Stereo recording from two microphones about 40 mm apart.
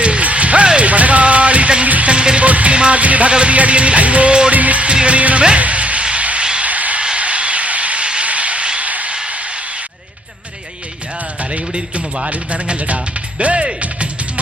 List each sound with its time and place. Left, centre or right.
0.0 s music: right
2.1 s music: right
6.7 s a sound: right
11.5 s music: right
12.3 s speech: right
13.8 s music: right